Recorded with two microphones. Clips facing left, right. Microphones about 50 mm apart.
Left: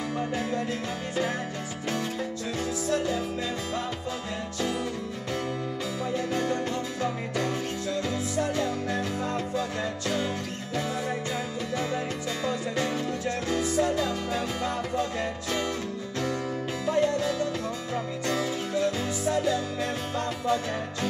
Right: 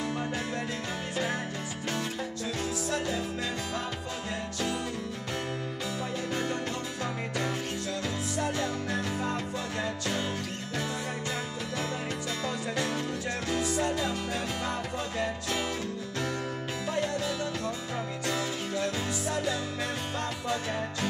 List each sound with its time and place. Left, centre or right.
12.4 s music: centre